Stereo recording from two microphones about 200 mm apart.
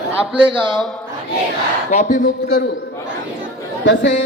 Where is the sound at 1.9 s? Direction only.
40° left (ahead or behind).